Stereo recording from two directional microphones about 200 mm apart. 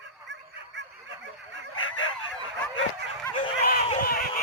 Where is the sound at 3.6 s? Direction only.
50° left (ahead or behind).